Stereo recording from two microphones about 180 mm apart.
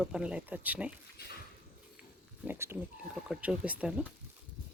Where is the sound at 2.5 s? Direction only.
10° right (ahead or behind).